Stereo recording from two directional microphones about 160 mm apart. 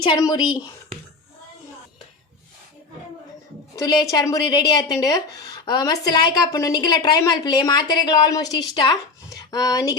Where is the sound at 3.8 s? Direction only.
20° left (ahead or behind).